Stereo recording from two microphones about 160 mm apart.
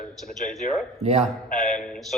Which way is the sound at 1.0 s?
45° right (ahead or behind).